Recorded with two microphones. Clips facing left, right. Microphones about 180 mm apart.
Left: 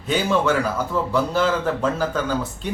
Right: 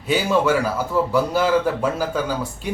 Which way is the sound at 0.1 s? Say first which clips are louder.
Right 1 dB; 10° right (ahead or behind).